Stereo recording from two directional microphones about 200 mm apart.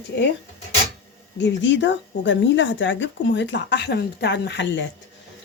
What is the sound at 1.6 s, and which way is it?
Speech, 65° left (ahead or behind).